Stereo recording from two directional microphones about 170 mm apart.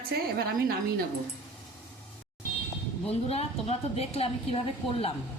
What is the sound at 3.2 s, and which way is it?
A woman's voice, 35° left (ahead or behind).